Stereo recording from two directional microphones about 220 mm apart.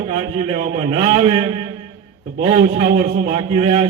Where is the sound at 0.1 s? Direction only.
25° right (ahead or behind).